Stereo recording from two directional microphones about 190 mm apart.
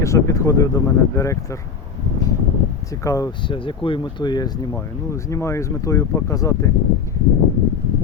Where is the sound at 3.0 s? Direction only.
20° left (ahead or behind).